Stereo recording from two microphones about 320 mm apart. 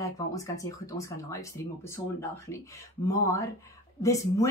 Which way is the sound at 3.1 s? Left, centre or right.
Centre.